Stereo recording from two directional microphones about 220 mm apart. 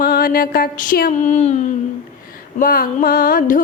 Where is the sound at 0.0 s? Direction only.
45° left (ahead or behind).